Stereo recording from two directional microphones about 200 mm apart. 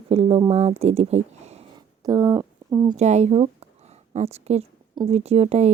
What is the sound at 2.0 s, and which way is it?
Speech, 20° right (ahead or behind).